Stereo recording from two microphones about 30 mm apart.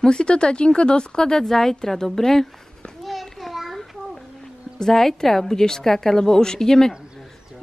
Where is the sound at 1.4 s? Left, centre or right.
Centre.